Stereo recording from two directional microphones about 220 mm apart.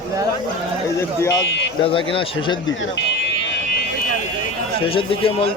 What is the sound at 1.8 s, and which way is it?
Speech, 25° left (ahead or behind).